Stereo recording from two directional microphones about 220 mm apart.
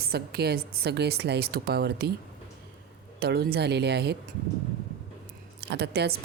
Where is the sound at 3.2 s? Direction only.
45° right (ahead or behind).